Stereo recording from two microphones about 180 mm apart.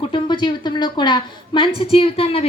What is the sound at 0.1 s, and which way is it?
A woman's voice, 25° left (ahead or behind).